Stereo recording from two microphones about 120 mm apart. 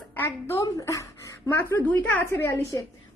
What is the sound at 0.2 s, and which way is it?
A woman's voice, 20° left (ahead or behind).